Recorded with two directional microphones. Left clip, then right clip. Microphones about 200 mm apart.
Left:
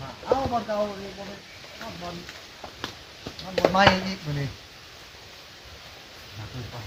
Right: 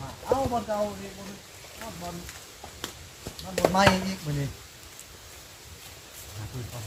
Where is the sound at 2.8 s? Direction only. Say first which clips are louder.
Left 3 dB; 20° left (ahead or behind).